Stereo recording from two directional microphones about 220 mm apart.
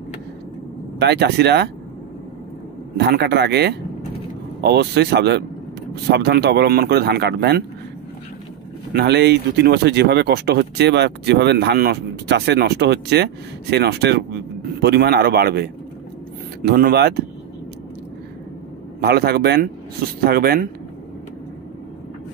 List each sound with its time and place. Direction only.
0.9 s speech: 50° right (ahead or behind)
3.0 s speech: 50° right (ahead or behind)
8.9 s speech: 50° right (ahead or behind)
16.6 s speech: 45° right (ahead or behind)
18.9 s speech: 45° right (ahead or behind)